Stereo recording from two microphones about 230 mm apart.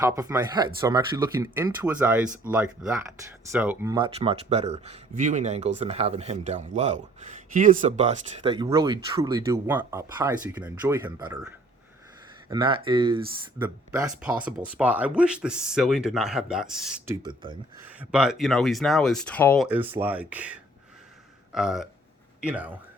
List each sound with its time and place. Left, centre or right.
0.0 s speech: centre
8.5 s speech: centre
12.5 s speech: right; by 17.2 s centre
17.2 s speech: right
18.0 s speech: centre
19.6 s speech: centre